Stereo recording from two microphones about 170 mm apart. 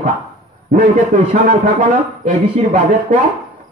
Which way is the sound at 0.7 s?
50° right (ahead or behind).